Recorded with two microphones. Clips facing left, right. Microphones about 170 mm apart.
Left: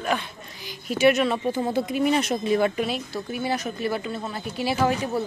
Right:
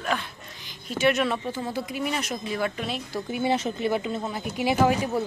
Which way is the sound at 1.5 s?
25° left (ahead or behind).